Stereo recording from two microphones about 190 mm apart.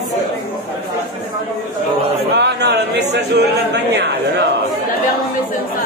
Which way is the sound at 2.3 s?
65° right (ahead or behind).